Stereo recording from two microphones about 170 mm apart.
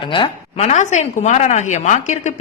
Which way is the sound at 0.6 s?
45° left (ahead or behind).